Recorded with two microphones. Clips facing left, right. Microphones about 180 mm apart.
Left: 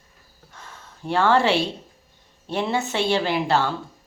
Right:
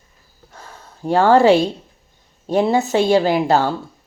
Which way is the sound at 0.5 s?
40° right (ahead or behind).